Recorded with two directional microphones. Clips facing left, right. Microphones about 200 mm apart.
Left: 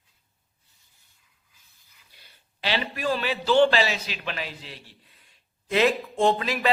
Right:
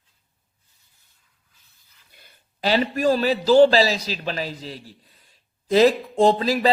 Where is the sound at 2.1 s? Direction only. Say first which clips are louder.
Right 6 dB; 45° right (ahead or behind).